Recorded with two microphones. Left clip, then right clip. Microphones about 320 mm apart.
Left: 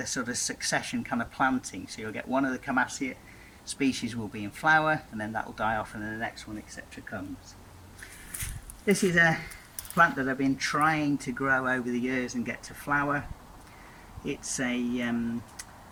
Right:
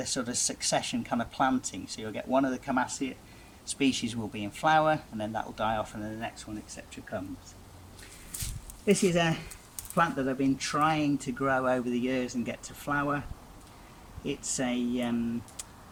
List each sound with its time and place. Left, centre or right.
0.0 s speech: centre
8.9 s speech: centre
14.3 s speech: centre